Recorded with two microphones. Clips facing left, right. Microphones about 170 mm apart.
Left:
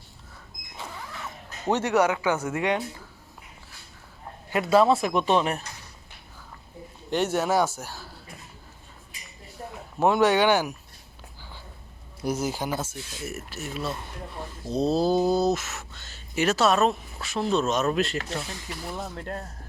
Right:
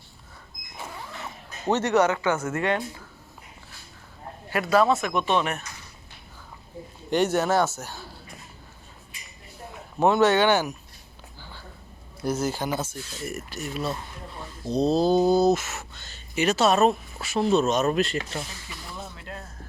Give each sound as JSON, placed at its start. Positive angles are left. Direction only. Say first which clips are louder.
{"t": 0.8, "sound": "a sound", "louder": "right 1 dB", "side_deg": -15}
{"t": 1.6, "sound": "speech", "louder": "right 1 dB", "side_deg": 10}
{"t": 4.5, "sound": "speech", "louder": "left 1 dB", "side_deg": 25}
{"t": 7.1, "sound": "speech", "louder": "right 2 dB", "side_deg": 5}
{"t": 10.0, "sound": "speech", "louder": "right 1 dB", "side_deg": 10}
{"t": 12.2, "sound": "speech", "louder": "right 1 dB", "side_deg": 10}
{"t": 18.7, "sound": "speech", "louder": "left 5 dB", "side_deg": 45}